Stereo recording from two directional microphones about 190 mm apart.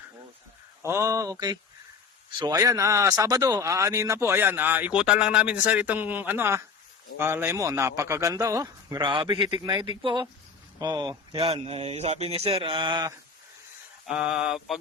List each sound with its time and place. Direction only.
0.8 s speech: 15° right (ahead or behind)
14.1 s mantra: 5° right (ahead or behind)